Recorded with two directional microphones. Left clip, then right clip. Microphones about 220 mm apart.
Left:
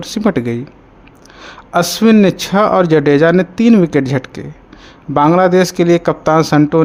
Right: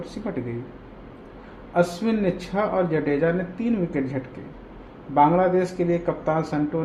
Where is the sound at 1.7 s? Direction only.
45° left (ahead or behind).